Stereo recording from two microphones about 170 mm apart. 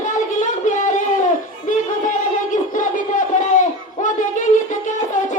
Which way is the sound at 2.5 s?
50° left (ahead or behind).